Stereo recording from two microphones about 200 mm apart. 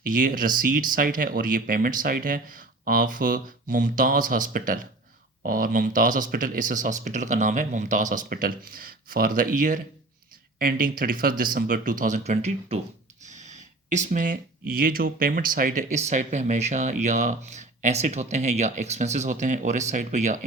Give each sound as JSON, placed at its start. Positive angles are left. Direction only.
{"t": 0.0, "sound": "speech", "side_deg": -45}
{"t": 13.2, "sound": "a sound", "side_deg": -35}
{"t": 14.7, "sound": "speech", "side_deg": -45}